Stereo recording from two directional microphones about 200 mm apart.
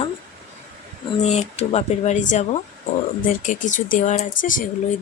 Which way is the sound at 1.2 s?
35° left (ahead or behind).